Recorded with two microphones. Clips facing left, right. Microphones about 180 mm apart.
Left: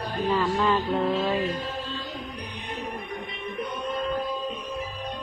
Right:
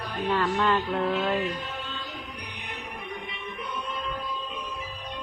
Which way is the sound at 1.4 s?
30° left (ahead or behind).